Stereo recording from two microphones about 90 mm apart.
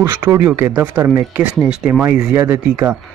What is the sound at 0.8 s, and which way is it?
Speech, 20° right (ahead or behind).